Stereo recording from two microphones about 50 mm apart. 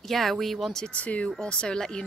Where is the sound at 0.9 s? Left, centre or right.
Left.